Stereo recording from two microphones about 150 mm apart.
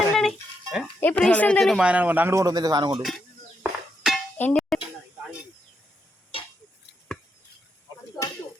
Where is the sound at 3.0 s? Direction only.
Centre (ahead or behind).